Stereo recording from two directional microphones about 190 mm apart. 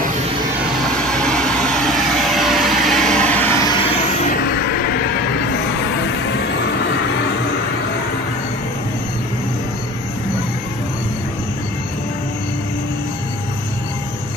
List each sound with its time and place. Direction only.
1.1 s vehicle: 5° left (ahead or behind); by 3.9 s 20° left (ahead or behind)
4.5 s vehicle: 55° left (ahead or behind)